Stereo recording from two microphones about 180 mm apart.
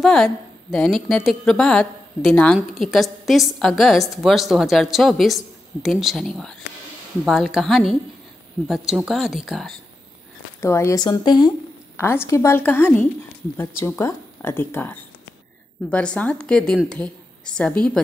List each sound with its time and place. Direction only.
0.0 s a woman's voice: centre (ahead or behind)
10.6 s speech: 15° left (ahead or behind)
12.0 s a woman's voice: 15° left (ahead or behind)